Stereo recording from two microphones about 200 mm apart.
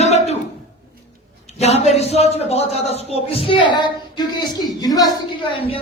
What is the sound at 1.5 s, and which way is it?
A man's voice, 30° left (ahead or behind).